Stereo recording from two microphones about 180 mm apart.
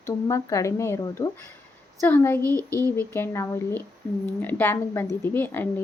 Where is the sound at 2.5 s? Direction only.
20° right (ahead or behind).